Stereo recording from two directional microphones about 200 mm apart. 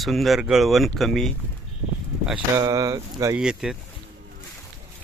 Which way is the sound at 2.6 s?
15° right (ahead or behind).